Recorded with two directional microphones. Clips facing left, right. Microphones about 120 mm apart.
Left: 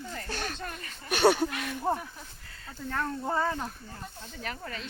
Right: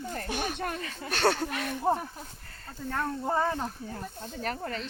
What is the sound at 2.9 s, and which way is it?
Speech, 20° right (ahead or behind).